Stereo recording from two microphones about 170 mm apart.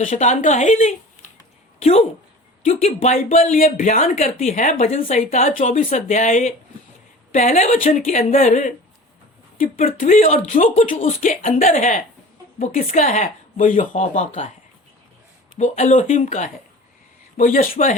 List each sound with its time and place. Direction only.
0.0 s speech: 45° left (ahead or behind)
15.5 s speech: 45° left (ahead or behind)